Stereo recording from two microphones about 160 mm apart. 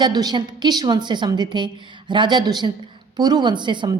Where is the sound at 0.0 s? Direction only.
25° right (ahead or behind).